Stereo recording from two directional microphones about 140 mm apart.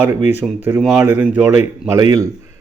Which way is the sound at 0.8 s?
Centre (ahead or behind).